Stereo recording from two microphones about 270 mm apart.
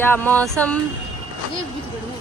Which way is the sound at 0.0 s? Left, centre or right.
Centre.